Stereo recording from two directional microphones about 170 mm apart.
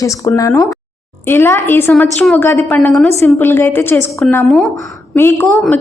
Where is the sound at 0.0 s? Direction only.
20° left (ahead or behind).